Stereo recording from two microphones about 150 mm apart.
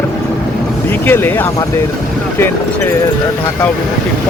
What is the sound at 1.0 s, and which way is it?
Speech, 15° left (ahead or behind).